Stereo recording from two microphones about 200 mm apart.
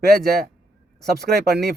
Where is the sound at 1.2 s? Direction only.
55° right (ahead or behind).